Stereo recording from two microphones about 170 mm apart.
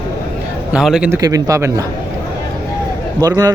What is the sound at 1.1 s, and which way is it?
Speech, 20° right (ahead or behind).